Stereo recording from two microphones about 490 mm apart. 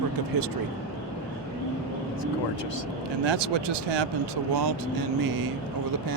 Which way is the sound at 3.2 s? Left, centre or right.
Right.